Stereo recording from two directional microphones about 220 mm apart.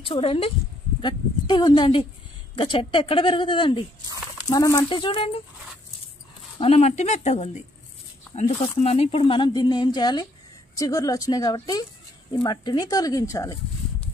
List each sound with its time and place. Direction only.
0.0 s speech: 25° left (ahead or behind)
6.6 s speech: 30° left (ahead or behind)